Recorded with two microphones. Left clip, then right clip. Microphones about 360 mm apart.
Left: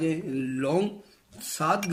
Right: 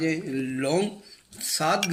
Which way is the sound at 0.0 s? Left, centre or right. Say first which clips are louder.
Right 1 dB; centre.